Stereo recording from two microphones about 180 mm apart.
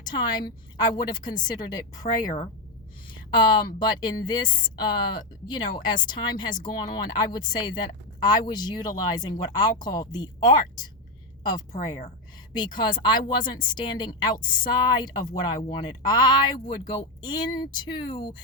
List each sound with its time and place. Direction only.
0.0 s speech: 25° left (ahead or behind)
2.0 s speech: 40° left (ahead or behind)
3.3 s speech: 25° left (ahead or behind)
11.7 s speech: 40° left (ahead or behind)
12.5 s speech: 25° left (ahead or behind)
14.3 s speech: 50° left (ahead or behind)
14.8 s speech: 25° left (ahead or behind)